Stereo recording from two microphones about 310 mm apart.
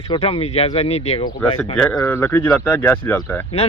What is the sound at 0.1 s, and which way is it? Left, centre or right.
Speech, centre.